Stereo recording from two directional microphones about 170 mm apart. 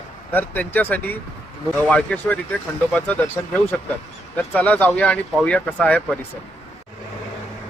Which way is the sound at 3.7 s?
5° left (ahead or behind).